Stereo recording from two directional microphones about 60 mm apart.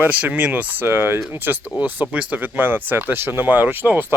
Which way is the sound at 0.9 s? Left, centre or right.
Right.